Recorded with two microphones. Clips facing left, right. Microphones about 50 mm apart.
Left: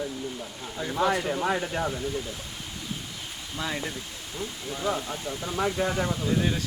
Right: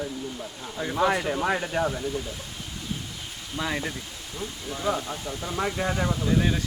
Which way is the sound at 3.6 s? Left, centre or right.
Right.